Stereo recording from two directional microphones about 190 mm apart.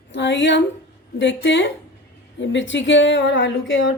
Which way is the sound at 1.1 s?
70° left (ahead or behind).